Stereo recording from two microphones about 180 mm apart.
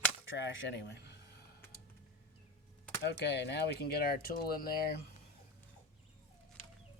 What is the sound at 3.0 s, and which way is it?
Speech, 70° left (ahead or behind).